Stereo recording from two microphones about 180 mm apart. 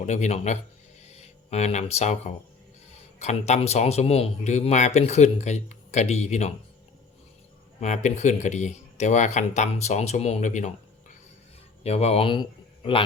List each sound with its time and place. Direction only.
0.0 s speech: 40° left (ahead or behind)
7.8 s speech: 40° left (ahead or behind)
11.8 s speech: 35° left (ahead or behind)